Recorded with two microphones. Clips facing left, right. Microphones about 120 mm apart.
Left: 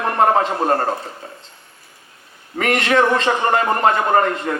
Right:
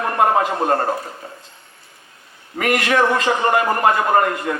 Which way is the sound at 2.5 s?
30° left (ahead or behind).